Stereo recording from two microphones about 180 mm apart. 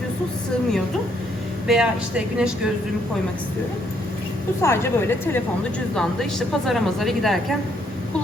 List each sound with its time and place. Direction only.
1.6 s speech: 5° right (ahead or behind)
4.6 s a woman's voice: 15° left (ahead or behind)